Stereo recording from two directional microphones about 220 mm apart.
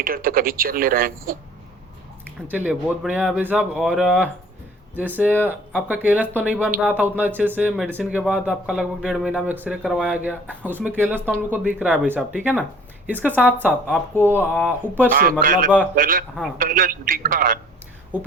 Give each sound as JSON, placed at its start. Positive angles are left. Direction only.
{"t": 0.0, "sound": "speech", "side_deg": -40}
{"t": 2.5, "sound": "a woman's voice", "side_deg": -5}
{"t": 13.8, "sound": "speech", "side_deg": 5}
{"t": 15.1, "sound": "speech", "side_deg": -40}